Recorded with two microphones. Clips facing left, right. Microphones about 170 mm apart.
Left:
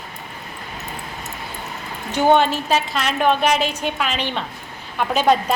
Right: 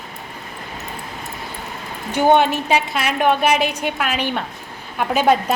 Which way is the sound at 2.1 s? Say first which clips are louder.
Right 1 dB; 15° right (ahead or behind).